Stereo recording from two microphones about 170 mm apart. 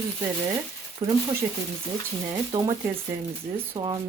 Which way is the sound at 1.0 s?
25° right (ahead or behind).